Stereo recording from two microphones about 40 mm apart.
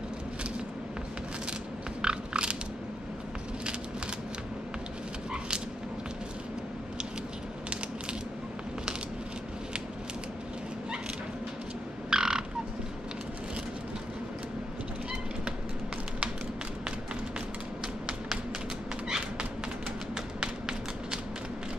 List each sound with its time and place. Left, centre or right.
2.0 s crunch: right
12.1 s frog: centre
19.0 s a sound: centre